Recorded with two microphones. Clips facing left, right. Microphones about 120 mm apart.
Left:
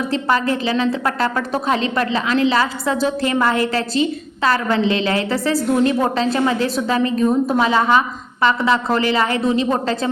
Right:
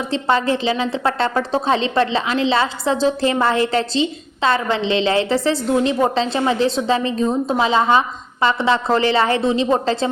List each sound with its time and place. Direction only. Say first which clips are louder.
0.1 s a woman's voice: right 2 dB; 25° right (ahead or behind)